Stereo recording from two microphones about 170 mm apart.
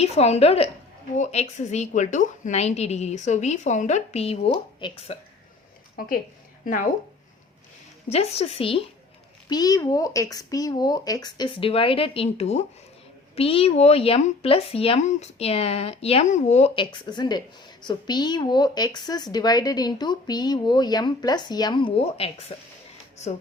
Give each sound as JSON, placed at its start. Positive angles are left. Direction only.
{"t": 0.0, "sound": "speech", "side_deg": 40}
{"t": 8.1, "sound": "speech", "side_deg": 35}
{"t": 9.5, "sound": "speech", "side_deg": 20}